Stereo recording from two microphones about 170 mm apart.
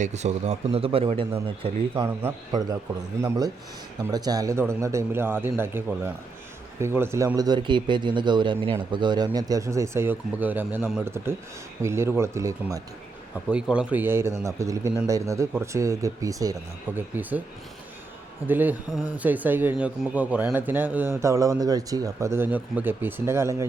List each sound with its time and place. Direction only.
0.0 s speech: 40° right (ahead or behind)
2.0 s speech: 20° right (ahead or behind)
13.5 s speech: 5° right (ahead or behind)
18.4 s speech: 10° right (ahead or behind)